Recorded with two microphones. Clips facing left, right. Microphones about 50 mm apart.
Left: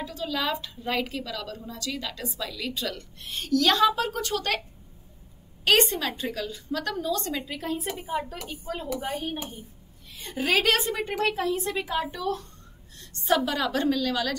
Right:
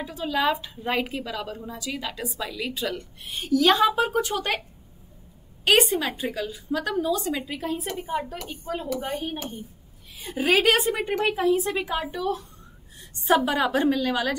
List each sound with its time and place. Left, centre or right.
0.0 s a woman's voice: centre
5.7 s a woman's voice: centre
13.1 s a sound: centre
13.5 s a woman's voice: centre